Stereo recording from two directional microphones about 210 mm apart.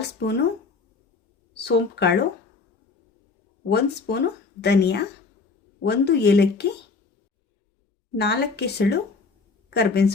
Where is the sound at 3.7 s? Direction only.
50° left (ahead or behind).